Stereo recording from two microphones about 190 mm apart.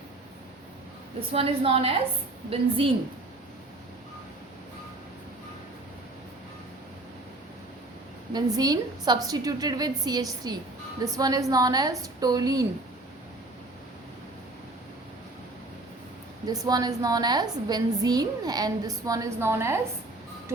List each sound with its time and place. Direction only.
1.3 s a woman's voice: 30° right (ahead or behind)
8.3 s a woman's voice: 20° right (ahead or behind)
16.5 s a woman's voice: 20° right (ahead or behind)